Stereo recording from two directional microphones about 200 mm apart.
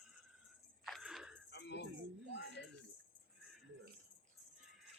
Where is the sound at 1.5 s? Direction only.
60° left (ahead or behind).